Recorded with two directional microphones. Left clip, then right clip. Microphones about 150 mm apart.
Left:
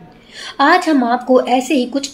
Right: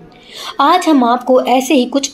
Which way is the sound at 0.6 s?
25° right (ahead or behind).